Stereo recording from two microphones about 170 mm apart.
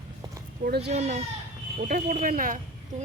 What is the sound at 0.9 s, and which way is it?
Speech, 40° right (ahead or behind).